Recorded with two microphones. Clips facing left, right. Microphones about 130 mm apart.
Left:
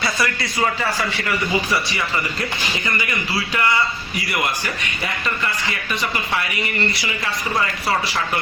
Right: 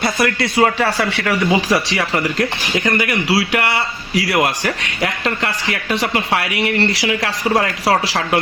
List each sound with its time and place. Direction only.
0.0 s speech: 60° right (ahead or behind); by 8.4 s 90° right